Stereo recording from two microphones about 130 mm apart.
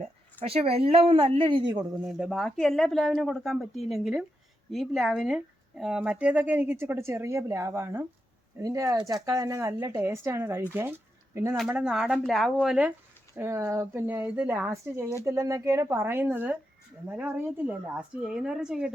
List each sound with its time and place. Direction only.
0.4 s a woman's voice: 50° right (ahead or behind)
2.0 s speech: 5° right (ahead or behind)
11.7 s speech: 5° right (ahead or behind)
13.3 s speech: 25° right (ahead or behind); by 18.9 s 5° right (ahead or behind)